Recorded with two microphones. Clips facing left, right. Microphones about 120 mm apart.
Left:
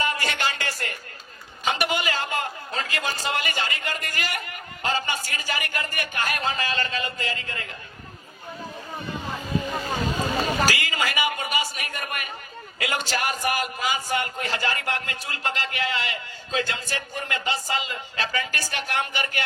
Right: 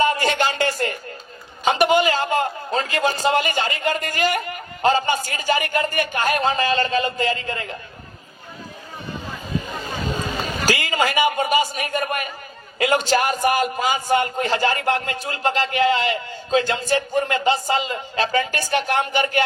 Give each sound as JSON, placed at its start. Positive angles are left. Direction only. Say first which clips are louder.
{"t": 0.0, "sound": "a sound", "louder": "right 7 dB", "side_deg": -30}
{"t": 3.2, "sound": "speech", "louder": "right 8 dB", "side_deg": -30}
{"t": 10.7, "sound": "a man's voice", "louder": "right 6 dB", "side_deg": -30}